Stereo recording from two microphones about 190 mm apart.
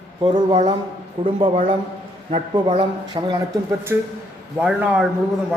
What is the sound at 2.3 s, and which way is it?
Speech, 30° right (ahead or behind).